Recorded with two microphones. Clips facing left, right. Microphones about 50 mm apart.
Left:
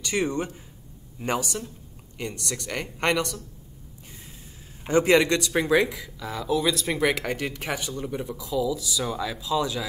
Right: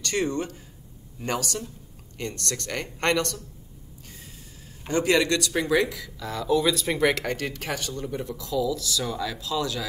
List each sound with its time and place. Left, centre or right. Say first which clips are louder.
0.0 s speech: even; centre
4.8 s speech: left 3 dB; left